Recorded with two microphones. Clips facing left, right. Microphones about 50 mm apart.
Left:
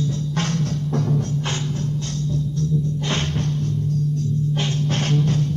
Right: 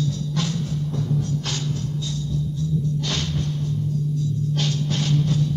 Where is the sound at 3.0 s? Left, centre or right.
Left.